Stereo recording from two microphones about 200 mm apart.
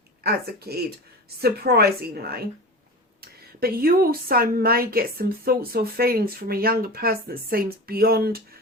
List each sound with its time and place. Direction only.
0.2 s a woman's voice: 50° right (ahead or behind)